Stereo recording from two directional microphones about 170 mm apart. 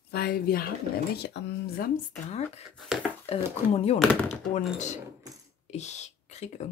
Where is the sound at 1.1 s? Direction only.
85° left.